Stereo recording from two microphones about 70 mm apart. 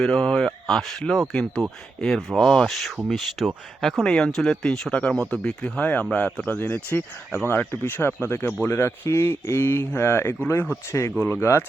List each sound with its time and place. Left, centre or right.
0.0 s speech: centre; by 11.6 s left